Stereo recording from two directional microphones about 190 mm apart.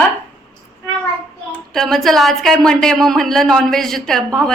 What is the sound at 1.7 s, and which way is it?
A woman's voice, centre (ahead or behind).